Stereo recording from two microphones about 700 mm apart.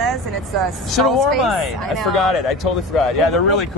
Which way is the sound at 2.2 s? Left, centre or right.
Left.